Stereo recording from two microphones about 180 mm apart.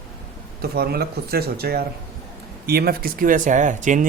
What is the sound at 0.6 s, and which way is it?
Speech, 60° right (ahead or behind).